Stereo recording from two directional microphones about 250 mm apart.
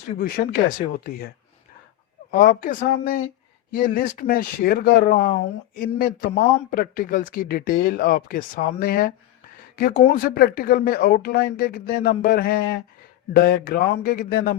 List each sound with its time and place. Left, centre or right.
0.2 s speech: left
2.3 s speech: left